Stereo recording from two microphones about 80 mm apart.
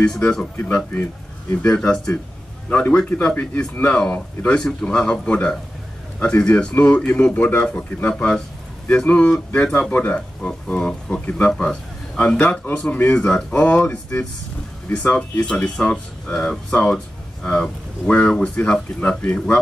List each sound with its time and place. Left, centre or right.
0.0 s speech: centre
14.9 s speech: centre